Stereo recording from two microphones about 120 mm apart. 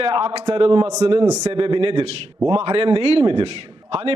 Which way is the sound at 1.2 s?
30° right (ahead or behind).